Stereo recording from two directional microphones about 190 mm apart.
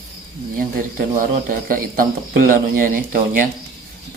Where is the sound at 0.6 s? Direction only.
45° right (ahead or behind).